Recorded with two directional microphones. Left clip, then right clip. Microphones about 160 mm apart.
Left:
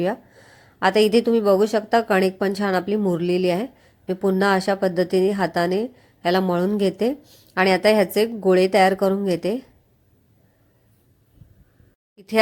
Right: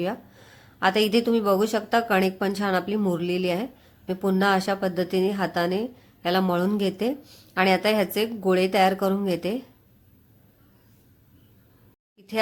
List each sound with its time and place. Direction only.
0.0 s speech: 25° left (ahead or behind)
7.2 s a woman's voice: 10° left (ahead or behind)
7.5 s speech: 25° left (ahead or behind)
12.1 s a sound: 40° left (ahead or behind)